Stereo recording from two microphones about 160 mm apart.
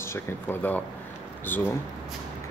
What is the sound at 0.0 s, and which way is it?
Speech, 15° left (ahead or behind).